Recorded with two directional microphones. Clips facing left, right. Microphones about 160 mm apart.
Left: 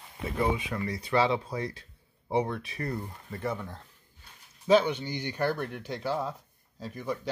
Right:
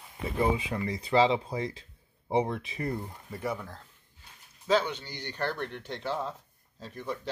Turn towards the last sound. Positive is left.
turn(degrees=5)  # may be behind; listen again after turning